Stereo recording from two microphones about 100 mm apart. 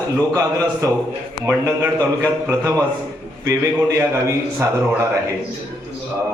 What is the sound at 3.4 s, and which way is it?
Speech, 30° right (ahead or behind).